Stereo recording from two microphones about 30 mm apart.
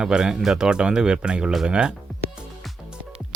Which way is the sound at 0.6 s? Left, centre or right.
Right.